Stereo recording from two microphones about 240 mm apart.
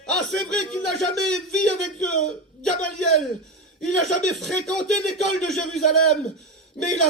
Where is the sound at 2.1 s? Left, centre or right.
Left.